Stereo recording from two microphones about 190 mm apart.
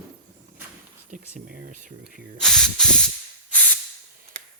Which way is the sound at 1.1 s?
45° right (ahead or behind).